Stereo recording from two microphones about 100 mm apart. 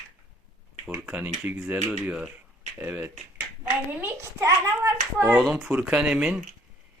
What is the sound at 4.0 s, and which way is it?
Speech, 30° right (ahead or behind).